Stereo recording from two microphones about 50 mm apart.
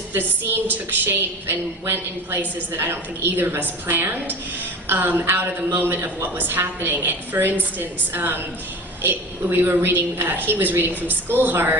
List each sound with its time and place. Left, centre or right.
0.1 s a woman's voice: right